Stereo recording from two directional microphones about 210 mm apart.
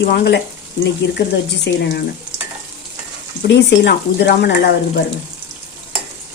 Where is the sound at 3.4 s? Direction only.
55° left (ahead or behind).